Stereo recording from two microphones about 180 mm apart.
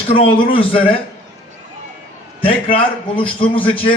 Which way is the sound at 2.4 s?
30° left (ahead or behind).